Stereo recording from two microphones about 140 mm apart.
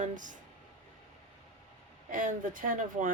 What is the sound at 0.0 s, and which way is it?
Speech, 65° right (ahead or behind).